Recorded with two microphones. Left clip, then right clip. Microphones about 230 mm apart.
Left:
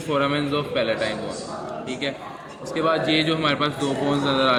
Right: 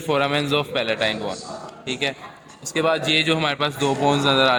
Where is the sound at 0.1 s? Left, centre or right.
Right.